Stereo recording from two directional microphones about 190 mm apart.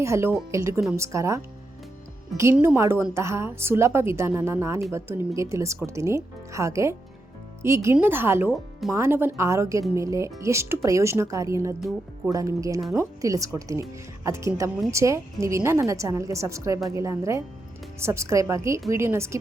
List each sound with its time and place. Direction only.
0.0 s a woman's voice: 15° right (ahead or behind)
11.8 s speech: centre (ahead or behind)
12.3 s a woman's voice: 15° right (ahead or behind)